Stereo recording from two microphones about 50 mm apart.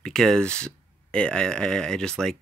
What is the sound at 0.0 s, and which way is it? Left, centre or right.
Speech, centre.